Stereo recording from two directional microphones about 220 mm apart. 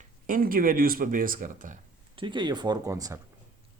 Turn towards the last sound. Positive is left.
turn(degrees=-15)  # may be behind; listen again after turning